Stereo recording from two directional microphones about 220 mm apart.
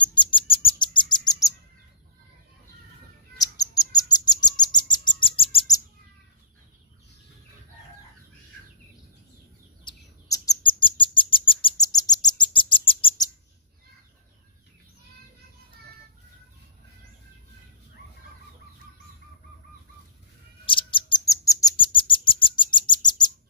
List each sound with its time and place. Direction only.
0.0 s bird: 20° left (ahead or behind)
3.3 s bird: 15° left (ahead or behind)
9.8 s bird: 15° left (ahead or behind)
20.6 s bird: 20° left (ahead or behind)